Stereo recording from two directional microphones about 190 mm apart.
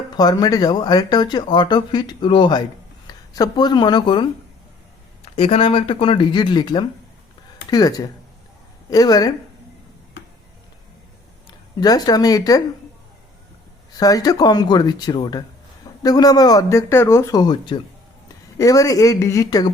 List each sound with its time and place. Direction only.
0.2 s speech: 20° left (ahead or behind)
11.8 s speech: 20° left (ahead or behind)
14.0 s speech: 20° left (ahead or behind)